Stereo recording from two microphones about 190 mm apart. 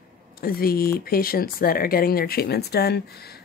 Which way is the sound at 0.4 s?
50° left (ahead or behind).